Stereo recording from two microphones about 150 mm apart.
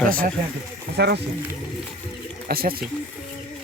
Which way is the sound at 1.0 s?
90° right.